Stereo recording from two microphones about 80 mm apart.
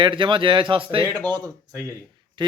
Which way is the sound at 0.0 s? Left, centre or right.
Right.